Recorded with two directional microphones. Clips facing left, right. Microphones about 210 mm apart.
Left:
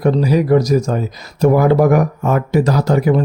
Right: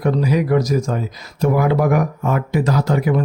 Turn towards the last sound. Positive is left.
turn(degrees=40)  # may be behind; listen again after turning